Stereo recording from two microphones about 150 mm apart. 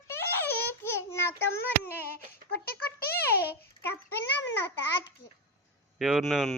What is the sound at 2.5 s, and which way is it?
Speech, 90° left.